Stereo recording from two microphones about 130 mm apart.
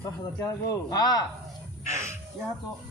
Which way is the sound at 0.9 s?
30° left (ahead or behind).